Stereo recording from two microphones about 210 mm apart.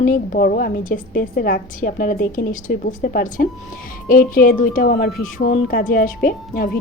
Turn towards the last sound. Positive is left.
turn(degrees=45)  # may be behind; listen again after turning